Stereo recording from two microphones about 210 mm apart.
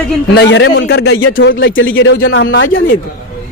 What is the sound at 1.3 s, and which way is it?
Speech, 65° left (ahead or behind).